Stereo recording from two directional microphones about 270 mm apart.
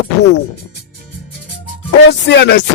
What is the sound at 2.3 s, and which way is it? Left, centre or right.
Music, left.